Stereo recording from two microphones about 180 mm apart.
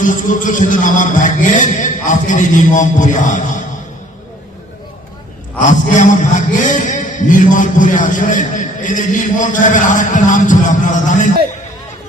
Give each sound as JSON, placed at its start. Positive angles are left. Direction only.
{"t": 0.0, "sound": "a man's voice", "side_deg": 45}
{"t": 5.5, "sound": "a man's voice", "side_deg": 45}